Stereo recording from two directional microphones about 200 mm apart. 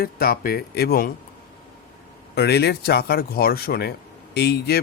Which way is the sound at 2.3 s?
55° left (ahead or behind).